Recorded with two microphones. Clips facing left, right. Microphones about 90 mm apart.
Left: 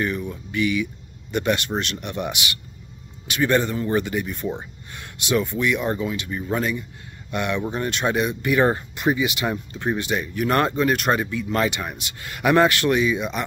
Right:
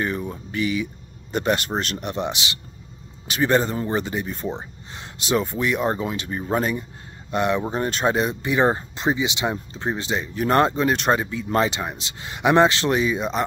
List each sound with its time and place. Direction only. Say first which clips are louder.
0.0 s speech: even; 35° right (ahead or behind)